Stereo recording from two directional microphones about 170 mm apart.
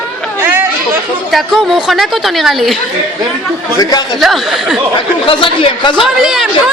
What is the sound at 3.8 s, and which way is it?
Speech, 25° left (ahead or behind).